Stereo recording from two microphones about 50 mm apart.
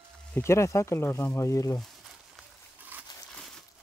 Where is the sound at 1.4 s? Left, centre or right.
Left.